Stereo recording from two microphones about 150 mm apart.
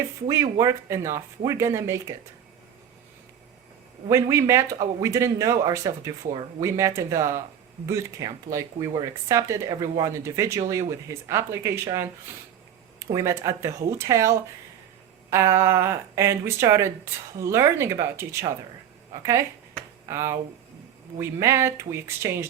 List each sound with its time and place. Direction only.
0.6 s speech: 20° right (ahead or behind)
4.1 s speech: 20° right (ahead or behind)
13.1 s speech: 20° right (ahead or behind)